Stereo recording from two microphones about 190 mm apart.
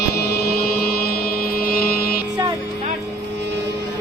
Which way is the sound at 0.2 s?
55° left (ahead or behind).